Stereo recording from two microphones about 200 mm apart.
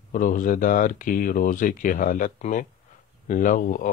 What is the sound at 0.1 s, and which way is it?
A man's voice, 40° left (ahead or behind).